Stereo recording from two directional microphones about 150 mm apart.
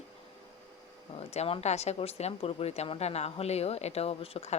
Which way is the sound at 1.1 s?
45° left (ahead or behind).